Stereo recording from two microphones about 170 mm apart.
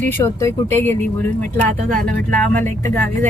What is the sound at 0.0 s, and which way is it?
Speech, 15° left (ahead or behind).